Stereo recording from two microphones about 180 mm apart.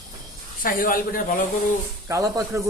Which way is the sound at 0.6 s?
50° left (ahead or behind).